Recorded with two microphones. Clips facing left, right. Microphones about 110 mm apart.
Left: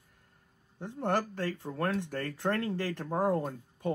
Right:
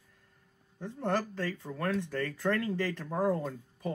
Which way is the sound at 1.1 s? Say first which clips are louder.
Left 1 dB; 65° left (ahead or behind).